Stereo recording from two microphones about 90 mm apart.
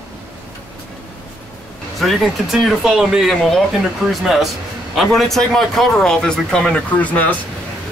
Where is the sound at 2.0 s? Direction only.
Centre (ahead or behind).